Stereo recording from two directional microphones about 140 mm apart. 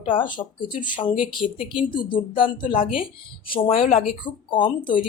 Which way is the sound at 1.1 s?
5° right (ahead or behind).